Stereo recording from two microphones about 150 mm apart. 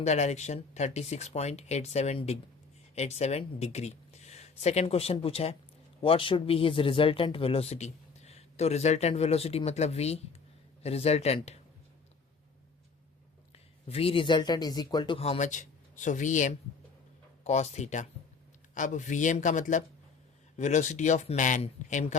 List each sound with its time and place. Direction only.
0.0 s speech: 50° left (ahead or behind)
13.8 s speech: 40° left (ahead or behind)
15.2 s a man's voice: 50° left (ahead or behind)